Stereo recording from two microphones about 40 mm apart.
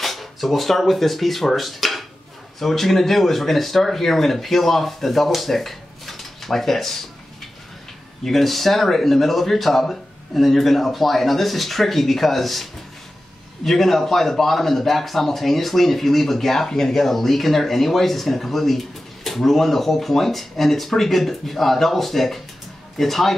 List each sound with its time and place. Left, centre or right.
0.0 s speech: centre
8.2 s speech: centre
13.7 s speech: centre